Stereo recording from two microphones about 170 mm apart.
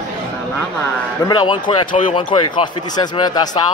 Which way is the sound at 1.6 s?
50° left (ahead or behind).